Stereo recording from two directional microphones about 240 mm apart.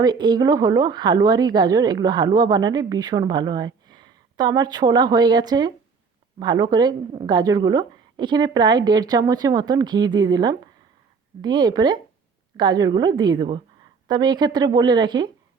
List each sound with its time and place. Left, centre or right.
0.0 s speech: centre